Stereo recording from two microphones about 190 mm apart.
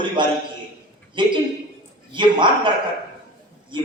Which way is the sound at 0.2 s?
25° right (ahead or behind).